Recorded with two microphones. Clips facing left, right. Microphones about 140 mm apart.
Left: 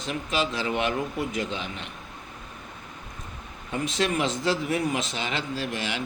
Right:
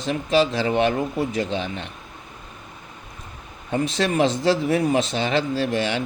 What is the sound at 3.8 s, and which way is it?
Speech, 35° right (ahead or behind).